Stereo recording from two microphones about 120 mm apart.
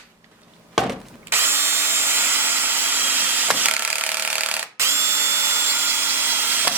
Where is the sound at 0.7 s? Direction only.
Centre (ahead or behind).